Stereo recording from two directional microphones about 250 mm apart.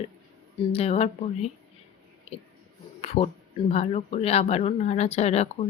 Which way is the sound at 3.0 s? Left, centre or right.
Left.